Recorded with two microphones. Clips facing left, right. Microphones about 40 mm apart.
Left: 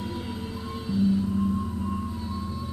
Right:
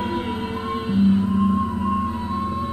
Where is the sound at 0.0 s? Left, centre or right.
Right.